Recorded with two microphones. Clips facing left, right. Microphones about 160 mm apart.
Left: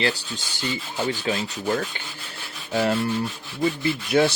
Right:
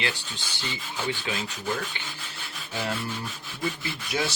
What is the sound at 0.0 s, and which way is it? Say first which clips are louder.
Rub: left 7 dB; 35° left (ahead or behind).